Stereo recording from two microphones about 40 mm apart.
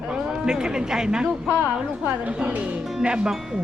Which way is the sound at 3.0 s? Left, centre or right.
Right.